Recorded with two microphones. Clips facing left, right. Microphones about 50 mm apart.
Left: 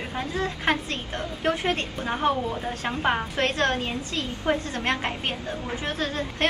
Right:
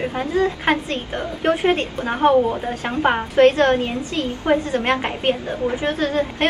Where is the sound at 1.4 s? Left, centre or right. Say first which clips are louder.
Right 7 dB; right.